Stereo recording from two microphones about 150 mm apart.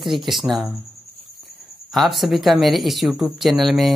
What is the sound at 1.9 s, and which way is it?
Speech, centre (ahead or behind).